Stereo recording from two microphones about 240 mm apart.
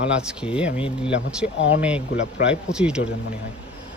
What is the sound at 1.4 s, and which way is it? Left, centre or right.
Speech, left.